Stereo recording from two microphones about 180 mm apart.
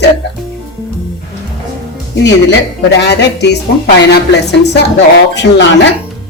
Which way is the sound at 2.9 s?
70° left (ahead or behind).